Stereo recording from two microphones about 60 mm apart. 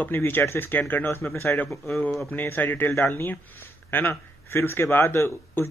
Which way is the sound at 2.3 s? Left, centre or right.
Left.